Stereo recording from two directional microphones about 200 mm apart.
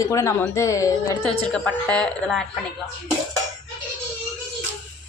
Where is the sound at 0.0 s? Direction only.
15° left (ahead or behind).